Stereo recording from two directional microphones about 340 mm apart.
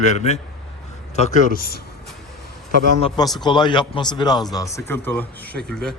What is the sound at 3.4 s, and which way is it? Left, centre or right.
Speech, centre.